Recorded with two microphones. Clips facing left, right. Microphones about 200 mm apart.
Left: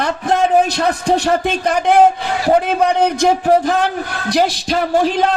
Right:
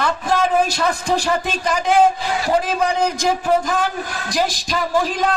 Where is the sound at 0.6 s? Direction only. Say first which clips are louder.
Left 3 dB; 65° left (ahead or behind).